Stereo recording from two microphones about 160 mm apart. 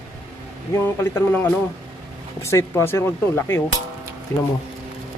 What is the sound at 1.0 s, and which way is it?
Speech, 15° left (ahead or behind).